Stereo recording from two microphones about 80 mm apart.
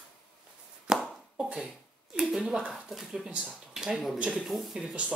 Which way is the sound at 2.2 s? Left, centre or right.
Centre.